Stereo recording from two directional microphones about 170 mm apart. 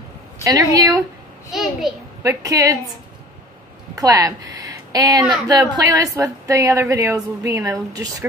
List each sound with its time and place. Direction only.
0.4 s a woman's voice: 20° right (ahead or behind)
1.5 s a child's voice: centre (ahead or behind)
2.2 s a woman's voice: 20° right (ahead or behind)
3.9 s a woman's voice: 20° right (ahead or behind)